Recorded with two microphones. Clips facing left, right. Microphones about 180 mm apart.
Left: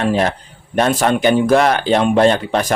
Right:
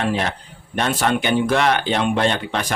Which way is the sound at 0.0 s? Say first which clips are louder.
Left 5 dB; 40° left (ahead or behind).